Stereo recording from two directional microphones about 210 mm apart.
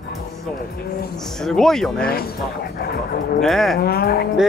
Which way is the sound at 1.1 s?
Centre (ahead or behind).